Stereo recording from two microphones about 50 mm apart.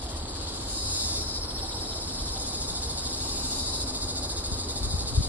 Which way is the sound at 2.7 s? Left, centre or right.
Right.